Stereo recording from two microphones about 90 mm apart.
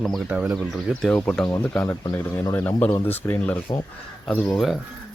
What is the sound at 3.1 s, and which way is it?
Speech, 20° left (ahead or behind).